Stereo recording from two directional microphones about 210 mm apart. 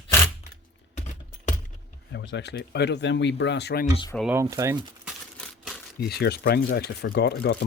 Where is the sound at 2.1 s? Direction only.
55° left (ahead or behind).